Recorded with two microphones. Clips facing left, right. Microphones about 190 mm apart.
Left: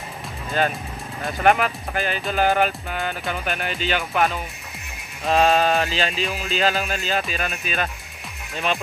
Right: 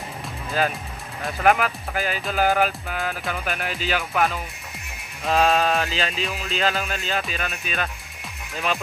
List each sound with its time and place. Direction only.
0.5 s speech: centre (ahead or behind)